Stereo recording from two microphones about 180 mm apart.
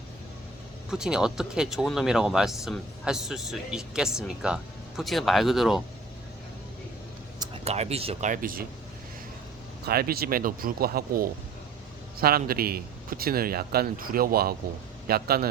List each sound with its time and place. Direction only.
0.9 s speech: 5° right (ahead or behind)
7.6 s speech: 35° right (ahead or behind)
8.3 s speech: 50° right (ahead or behind)
9.8 s speech: 60° right (ahead or behind)